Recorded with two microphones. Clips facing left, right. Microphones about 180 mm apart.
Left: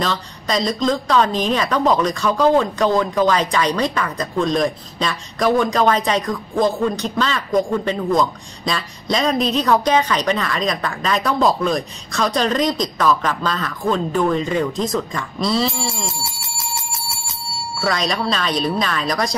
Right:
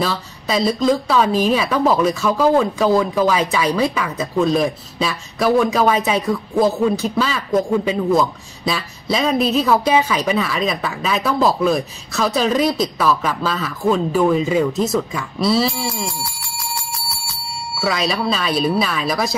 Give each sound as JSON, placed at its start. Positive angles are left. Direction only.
{"t": 0.0, "sound": "a woman's voice", "side_deg": -5}
{"t": 16.3, "sound": "bicycle bell", "side_deg": 20}
{"t": 17.7, "sound": "speech", "side_deg": -5}